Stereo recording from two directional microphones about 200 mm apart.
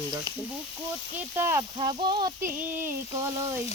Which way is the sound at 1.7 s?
25° right (ahead or behind).